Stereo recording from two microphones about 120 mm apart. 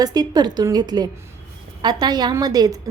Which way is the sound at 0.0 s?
30° right (ahead or behind).